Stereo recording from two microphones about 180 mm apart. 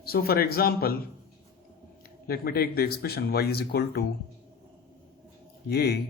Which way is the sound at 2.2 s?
55° left (ahead or behind).